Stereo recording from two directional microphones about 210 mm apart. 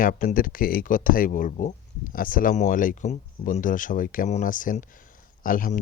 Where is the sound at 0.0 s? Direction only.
40° left (ahead or behind).